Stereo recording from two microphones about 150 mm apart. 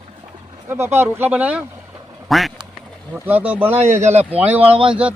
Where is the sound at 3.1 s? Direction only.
10° right (ahead or behind).